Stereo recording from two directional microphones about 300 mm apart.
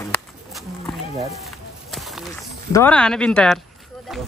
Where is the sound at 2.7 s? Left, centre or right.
Centre.